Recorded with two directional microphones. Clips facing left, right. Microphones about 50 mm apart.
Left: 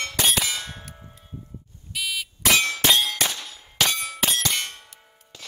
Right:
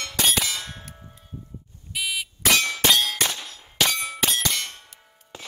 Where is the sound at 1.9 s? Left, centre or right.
Centre.